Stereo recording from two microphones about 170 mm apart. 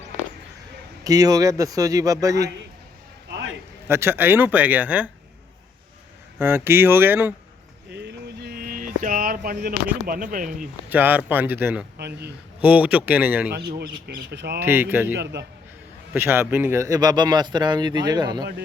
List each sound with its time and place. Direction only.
1.0 s speech: 20° right (ahead or behind)
3.8 s speech: 15° right (ahead or behind)
6.4 s speech: 15° right (ahead or behind)
7.9 s a sound: 75° right (ahead or behind); by 10.5 s 55° right (ahead or behind)
10.8 s speech: 10° right (ahead or behind)
11.9 s speech: 75° right (ahead or behind)
12.6 s speech: 10° right (ahead or behind)
13.7 s speech: 65° right (ahead or behind)
14.6 s speech: 10° right (ahead or behind)
15.2 s a man's voice: 90° right
16.1 s speech: 15° right (ahead or behind)